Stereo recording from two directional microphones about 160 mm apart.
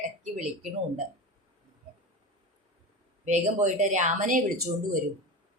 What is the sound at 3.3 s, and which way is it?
A woman's voice, 45° right (ahead or behind).